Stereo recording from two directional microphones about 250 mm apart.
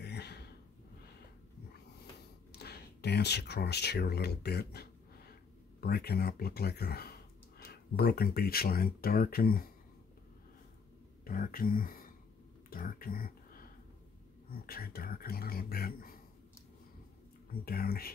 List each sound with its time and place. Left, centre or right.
0.0 s a sound: left
2.5 s speech: left
11.2 s speech: left
17.5 s speech: left